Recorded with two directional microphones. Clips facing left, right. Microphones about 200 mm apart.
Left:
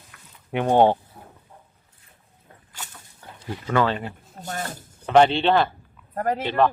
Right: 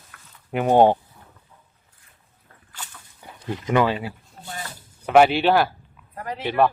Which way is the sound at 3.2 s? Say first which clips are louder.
Right 3 dB; 10° right (ahead or behind).